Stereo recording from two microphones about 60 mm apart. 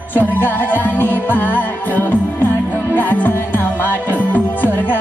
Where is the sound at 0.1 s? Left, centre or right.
Left.